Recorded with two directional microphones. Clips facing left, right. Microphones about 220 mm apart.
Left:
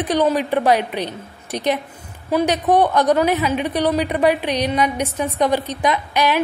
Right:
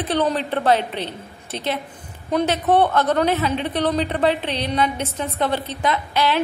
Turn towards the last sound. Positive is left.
turn(degrees=15)  # may be behind; listen again after turning